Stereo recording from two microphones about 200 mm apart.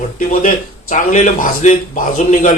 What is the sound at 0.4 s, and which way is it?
Speech, 40° left (ahead or behind).